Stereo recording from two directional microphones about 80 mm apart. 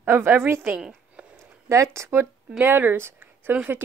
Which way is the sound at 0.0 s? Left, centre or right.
Right.